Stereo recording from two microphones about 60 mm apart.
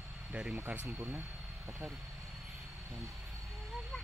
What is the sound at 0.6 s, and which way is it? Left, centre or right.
Speech, right.